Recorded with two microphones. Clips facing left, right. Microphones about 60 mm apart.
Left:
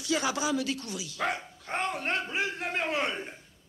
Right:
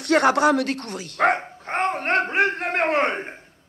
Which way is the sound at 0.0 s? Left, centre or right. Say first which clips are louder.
Right 12 dB; right.